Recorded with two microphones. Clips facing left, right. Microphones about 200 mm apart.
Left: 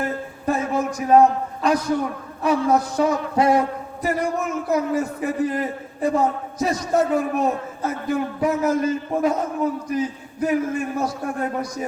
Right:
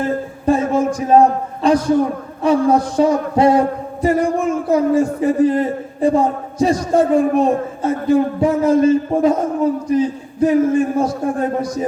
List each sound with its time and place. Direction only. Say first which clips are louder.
0.0 s a man's voice: right 6 dB; 30° right (ahead or behind)